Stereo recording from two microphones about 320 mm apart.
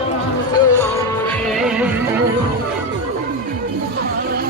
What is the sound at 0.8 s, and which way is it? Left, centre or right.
Music, centre.